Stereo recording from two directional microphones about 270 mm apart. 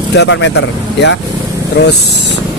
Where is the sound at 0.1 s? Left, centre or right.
Left.